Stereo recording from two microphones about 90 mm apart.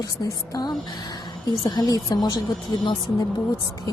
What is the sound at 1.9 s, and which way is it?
Speech, 40° left (ahead or behind).